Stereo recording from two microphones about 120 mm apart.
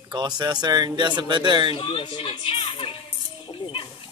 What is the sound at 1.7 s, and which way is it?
Speech, 45° left (ahead or behind).